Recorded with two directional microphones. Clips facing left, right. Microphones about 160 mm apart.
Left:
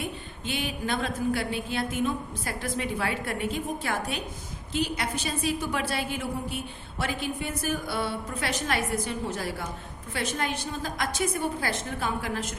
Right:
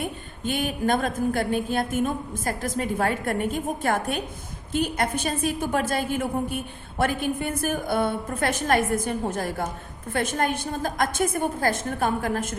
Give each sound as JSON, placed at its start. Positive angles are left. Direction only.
{"t": 0.0, "sound": "a woman's voice", "side_deg": -50}